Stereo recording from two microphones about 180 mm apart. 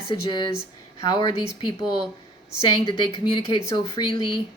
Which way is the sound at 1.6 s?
25° left (ahead or behind).